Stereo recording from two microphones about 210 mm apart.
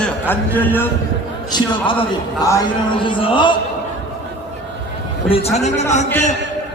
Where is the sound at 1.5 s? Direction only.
20° left (ahead or behind).